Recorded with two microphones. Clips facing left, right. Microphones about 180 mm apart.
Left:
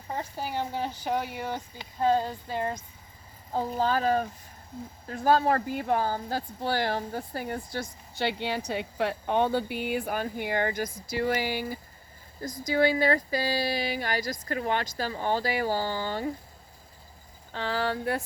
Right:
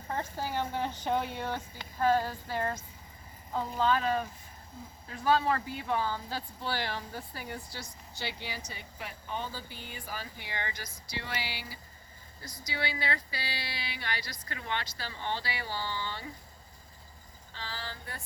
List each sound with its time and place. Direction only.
0.1 s speech: 15° left (ahead or behind)
3.5 s speech: 40° left (ahead or behind)
7.9 s speech: 65° left (ahead or behind); by 16.3 s 45° left (ahead or behind)
17.5 s speech: 60° left (ahead or behind)